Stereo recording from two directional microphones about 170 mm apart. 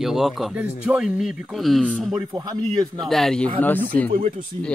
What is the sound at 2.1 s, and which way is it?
Speech, 25° right (ahead or behind).